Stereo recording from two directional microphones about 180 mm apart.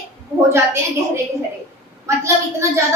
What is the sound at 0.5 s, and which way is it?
A woman's voice, 15° right (ahead or behind).